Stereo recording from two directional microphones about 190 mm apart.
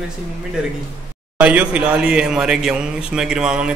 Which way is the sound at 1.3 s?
5° right (ahead or behind).